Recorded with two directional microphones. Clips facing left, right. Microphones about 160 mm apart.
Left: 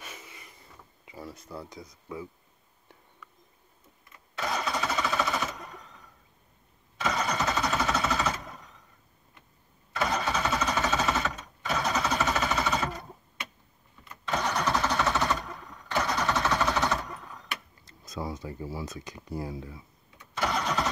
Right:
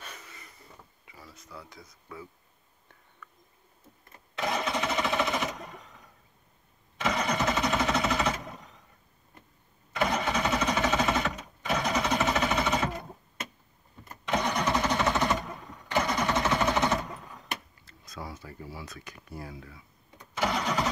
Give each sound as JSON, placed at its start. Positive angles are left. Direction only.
{"t": 0.0, "sound": "a sound", "side_deg": 10}
{"t": 1.3, "sound": "speech", "side_deg": 30}
{"t": 1.8, "sound": "speech", "side_deg": 15}
{"t": 4.5, "sound": "sewing machine", "side_deg": -20}
{"t": 7.0, "sound": "vehicle", "side_deg": -15}
{"t": 9.9, "sound": "vehicle", "side_deg": -15}
{"t": 14.2, "sound": "engine starting", "side_deg": -15}
{"t": 15.9, "sound": "a sound", "side_deg": -15}
{"t": 18.0, "sound": "speech", "side_deg": 20}
{"t": 20.3, "sound": "engine starting", "side_deg": -5}